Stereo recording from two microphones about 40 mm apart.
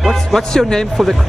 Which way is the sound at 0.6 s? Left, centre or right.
Centre.